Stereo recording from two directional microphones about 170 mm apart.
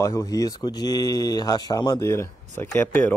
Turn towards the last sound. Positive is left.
turn(degrees=10)  # may be behind; listen again after turning